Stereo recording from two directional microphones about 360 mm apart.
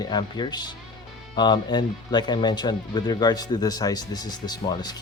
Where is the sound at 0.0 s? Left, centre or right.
Centre.